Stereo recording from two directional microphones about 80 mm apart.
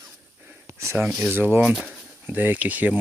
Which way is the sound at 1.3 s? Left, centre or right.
Right.